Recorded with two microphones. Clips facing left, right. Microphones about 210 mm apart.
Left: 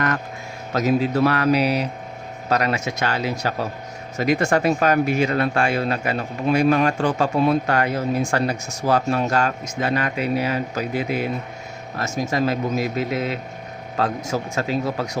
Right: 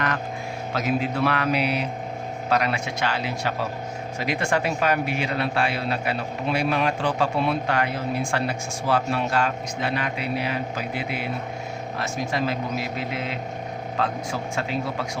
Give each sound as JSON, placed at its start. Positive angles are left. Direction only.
{"t": 0.7, "sound": "a man's voice", "side_deg": 40}